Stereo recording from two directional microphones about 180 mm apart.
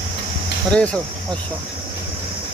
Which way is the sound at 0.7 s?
5° left (ahead or behind).